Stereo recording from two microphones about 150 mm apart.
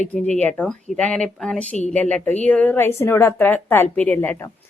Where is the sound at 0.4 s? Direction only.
10° left (ahead or behind).